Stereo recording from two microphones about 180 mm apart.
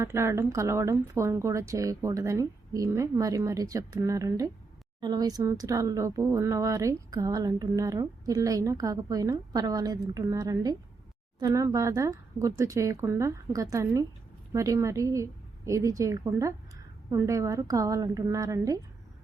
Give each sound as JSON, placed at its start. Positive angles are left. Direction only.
{"t": 0.0, "sound": "speech", "side_deg": -15}